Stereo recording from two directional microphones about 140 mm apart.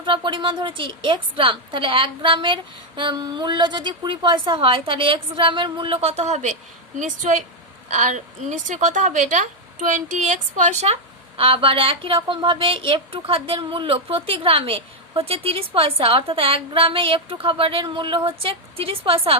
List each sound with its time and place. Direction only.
0.0 s a woman's voice: 35° right (ahead or behind); by 10.9 s 55° right (ahead or behind)
11.3 s a woman's voice: 40° right (ahead or behind)